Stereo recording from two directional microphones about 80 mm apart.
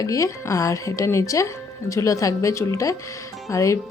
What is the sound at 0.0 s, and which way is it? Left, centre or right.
A woman's voice, left.